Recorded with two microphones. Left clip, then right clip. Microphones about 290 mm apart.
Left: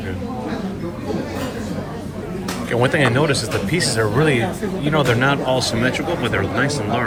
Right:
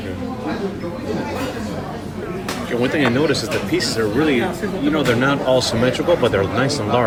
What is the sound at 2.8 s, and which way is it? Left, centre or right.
A man's voice, centre.